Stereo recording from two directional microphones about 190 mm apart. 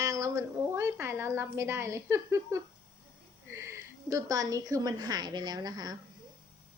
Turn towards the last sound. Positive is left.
turn(degrees=-20)  # may be behind; listen again after turning